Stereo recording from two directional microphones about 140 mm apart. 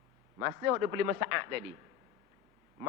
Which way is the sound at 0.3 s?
20° right (ahead or behind).